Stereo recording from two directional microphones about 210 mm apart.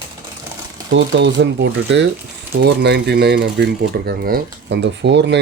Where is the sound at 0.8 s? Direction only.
60° right (ahead or behind).